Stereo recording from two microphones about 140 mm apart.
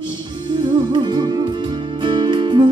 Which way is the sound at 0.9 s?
35° right (ahead or behind).